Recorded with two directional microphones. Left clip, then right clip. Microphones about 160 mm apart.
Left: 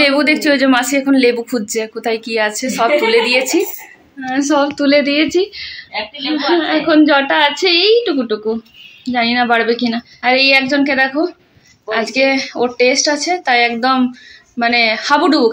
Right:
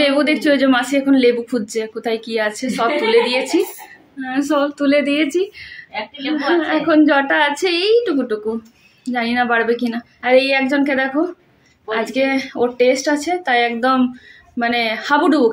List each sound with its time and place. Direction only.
0.0 s a woman's voice: 5° left (ahead or behind)
4.2 s speech: 20° left (ahead or behind)
4.6 s a woman's voice: 40° left (ahead or behind)
10.8 s a woman's voice: 20° left (ahead or behind)